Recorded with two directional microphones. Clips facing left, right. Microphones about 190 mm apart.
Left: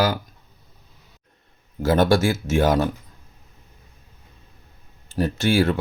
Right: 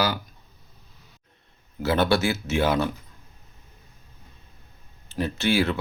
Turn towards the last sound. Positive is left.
turn(degrees=45)  # may be behind; listen again after turning